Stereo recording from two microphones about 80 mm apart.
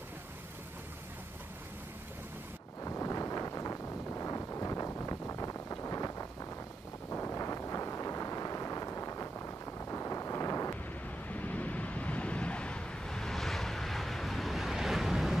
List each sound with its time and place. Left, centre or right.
2.8 s a sound: left
7.1 s wind noise: left
11.2 s vehicle: centre